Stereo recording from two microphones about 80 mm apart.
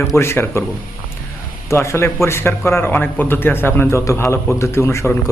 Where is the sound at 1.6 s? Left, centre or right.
Left.